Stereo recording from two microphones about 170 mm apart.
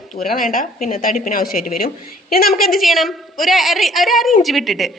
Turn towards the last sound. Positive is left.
turn(degrees=0)  # may be behind; listen again after turning